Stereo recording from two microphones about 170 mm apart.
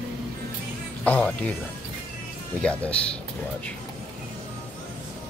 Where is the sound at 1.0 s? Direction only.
10° left (ahead or behind).